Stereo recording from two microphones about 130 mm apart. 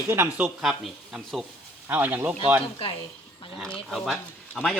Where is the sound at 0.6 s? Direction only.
Centre (ahead or behind).